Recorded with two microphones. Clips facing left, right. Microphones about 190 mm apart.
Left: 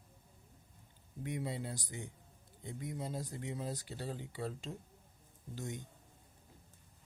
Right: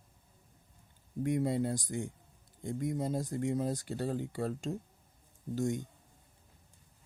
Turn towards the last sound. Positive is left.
turn(degrees=-45)  # may be behind; listen again after turning